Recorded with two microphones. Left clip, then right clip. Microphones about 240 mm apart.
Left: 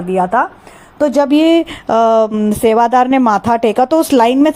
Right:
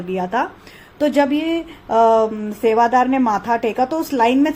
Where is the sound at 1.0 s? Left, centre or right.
Left.